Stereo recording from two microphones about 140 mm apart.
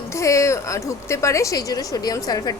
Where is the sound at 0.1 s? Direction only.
20° left (ahead or behind).